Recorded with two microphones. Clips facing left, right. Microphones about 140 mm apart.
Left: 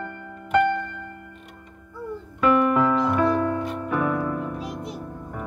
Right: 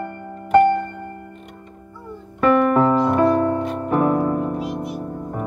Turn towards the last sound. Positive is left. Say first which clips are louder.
# right 7 dB
turn(degrees=-30)  # may be behind; listen again after turning